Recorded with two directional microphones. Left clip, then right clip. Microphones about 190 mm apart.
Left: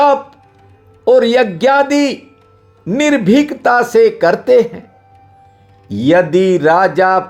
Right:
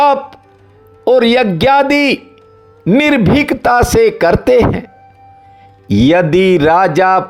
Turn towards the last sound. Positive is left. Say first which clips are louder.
# right 1 dB
turn(degrees=-30)  # may be behind; listen again after turning